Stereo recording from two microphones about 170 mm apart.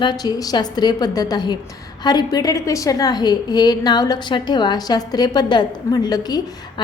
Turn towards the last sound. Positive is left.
turn(degrees=25)  # may be behind; listen again after turning